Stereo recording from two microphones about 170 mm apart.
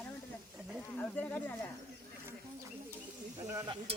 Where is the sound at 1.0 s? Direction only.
10° left (ahead or behind).